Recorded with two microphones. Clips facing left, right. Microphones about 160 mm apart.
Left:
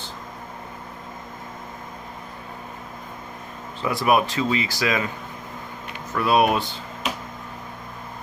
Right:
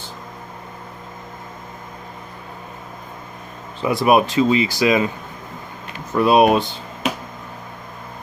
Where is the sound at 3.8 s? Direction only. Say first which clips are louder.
Right 5 dB; 15° right (ahead or behind).